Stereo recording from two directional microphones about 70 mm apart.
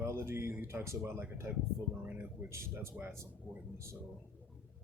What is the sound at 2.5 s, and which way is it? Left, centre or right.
Speech, right.